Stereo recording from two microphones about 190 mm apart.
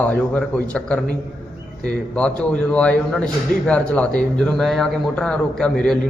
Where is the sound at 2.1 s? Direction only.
5° left (ahead or behind).